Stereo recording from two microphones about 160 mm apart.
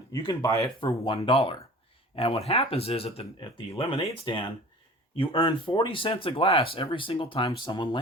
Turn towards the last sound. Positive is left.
turn(degrees=30)  # may be behind; listen again after turning